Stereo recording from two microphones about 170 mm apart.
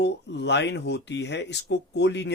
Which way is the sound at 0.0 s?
90° left.